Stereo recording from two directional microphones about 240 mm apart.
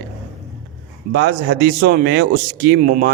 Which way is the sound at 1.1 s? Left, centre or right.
Right.